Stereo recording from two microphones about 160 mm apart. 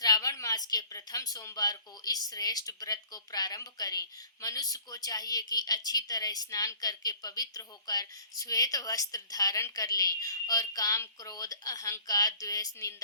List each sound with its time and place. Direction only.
0.0 s speech: 25° left (ahead or behind)